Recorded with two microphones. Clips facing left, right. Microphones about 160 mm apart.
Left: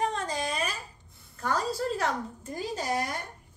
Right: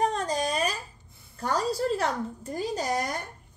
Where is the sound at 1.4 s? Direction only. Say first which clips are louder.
Right 2 dB; 35° right (ahead or behind).